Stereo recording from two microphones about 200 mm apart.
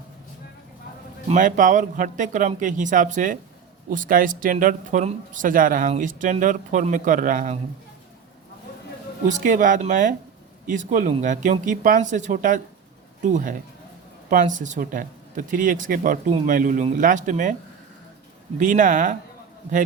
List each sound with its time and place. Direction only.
1.3 s speech: 40° right (ahead or behind)
9.2 s speech: 40° right (ahead or behind)
18.6 s speech: 40° right (ahead or behind)